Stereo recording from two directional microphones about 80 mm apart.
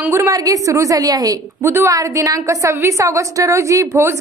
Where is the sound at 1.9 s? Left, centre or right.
Right.